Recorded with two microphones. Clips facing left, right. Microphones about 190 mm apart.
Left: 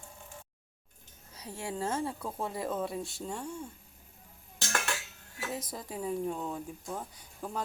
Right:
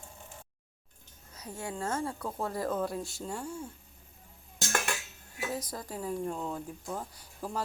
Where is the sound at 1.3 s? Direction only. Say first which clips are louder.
Left 1 dB; 30° left (ahead or behind).